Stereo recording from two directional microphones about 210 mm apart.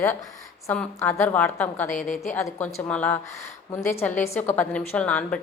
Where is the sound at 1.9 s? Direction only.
40° left (ahead or behind).